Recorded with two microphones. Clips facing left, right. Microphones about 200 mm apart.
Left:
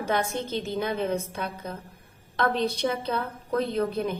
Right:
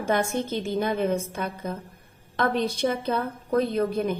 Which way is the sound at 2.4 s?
45° right (ahead or behind).